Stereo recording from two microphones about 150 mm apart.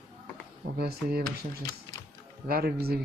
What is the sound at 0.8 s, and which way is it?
Speech, 90° right.